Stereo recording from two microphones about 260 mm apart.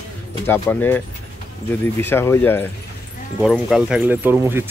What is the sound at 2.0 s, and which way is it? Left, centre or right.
Speech, centre.